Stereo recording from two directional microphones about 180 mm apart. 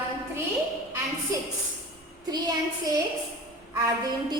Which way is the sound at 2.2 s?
20° right (ahead or behind).